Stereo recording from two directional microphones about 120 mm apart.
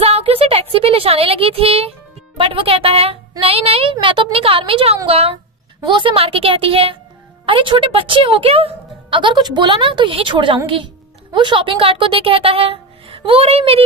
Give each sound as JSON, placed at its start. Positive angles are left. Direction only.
{"t": 0.0, "sound": "a woman's voice", "side_deg": -55}